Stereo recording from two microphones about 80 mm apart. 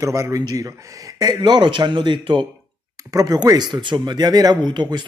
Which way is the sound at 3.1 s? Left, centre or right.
Right.